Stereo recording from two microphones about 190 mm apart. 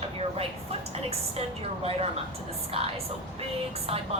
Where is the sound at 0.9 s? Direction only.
30° right (ahead or behind).